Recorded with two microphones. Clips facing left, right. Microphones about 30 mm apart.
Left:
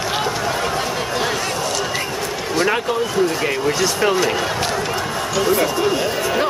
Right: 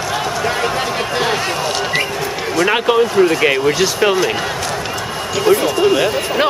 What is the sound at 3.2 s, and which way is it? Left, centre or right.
Speech, right.